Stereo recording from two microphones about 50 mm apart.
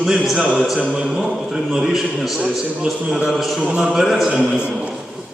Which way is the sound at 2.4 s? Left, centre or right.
Centre.